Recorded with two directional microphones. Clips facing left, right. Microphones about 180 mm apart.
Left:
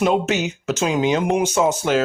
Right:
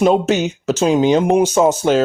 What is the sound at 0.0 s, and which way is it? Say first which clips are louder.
Speech: right 5 dB; 35° right (ahead or behind).